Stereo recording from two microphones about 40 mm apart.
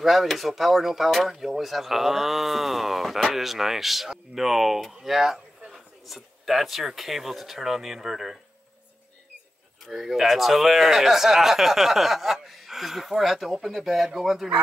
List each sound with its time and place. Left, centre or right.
0.0 s speech: centre
9.8 s speech: centre